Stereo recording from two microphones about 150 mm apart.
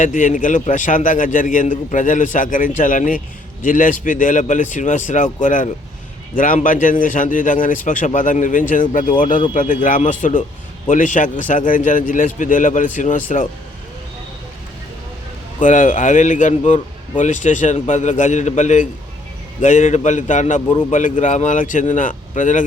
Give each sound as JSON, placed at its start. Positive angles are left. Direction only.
{"t": 0.0, "sound": "a man's voice", "side_deg": 55}
{"t": 15.6, "sound": "a man's voice", "side_deg": 60}